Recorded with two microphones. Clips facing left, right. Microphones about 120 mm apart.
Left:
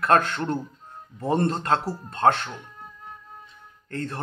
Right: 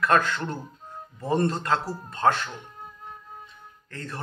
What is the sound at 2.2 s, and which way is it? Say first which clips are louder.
Speech: left 2 dB; 35° left (ahead or behind).